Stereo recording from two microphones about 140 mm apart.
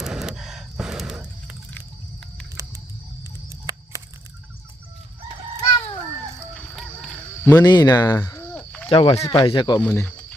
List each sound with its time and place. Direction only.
0.0 s music: 5° right (ahead or behind)
2.6 s a sound: 25° right (ahead or behind)
3.2 s music: 25° right (ahead or behind)
6.5 s music: centre (ahead or behind)
7.4 s speech: 25° left (ahead or behind)
8.9 s speech: 40° left (ahead or behind)
9.8 s speech: 10° left (ahead or behind)